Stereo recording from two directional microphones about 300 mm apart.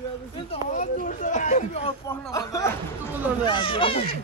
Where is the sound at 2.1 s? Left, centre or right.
Centre.